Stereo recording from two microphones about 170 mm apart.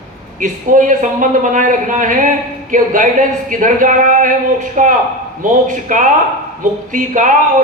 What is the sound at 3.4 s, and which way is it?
Speech, 50° right (ahead or behind).